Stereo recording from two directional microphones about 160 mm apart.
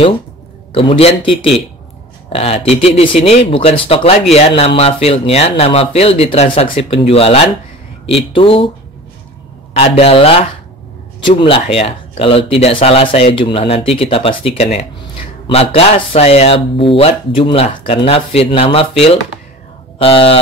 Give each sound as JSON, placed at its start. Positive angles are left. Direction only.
{"t": 0.7, "sound": "speech", "side_deg": 35}
{"t": 9.9, "sound": "speech", "side_deg": 40}